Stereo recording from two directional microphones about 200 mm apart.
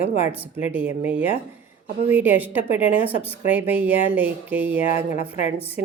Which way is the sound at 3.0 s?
30° left (ahead or behind).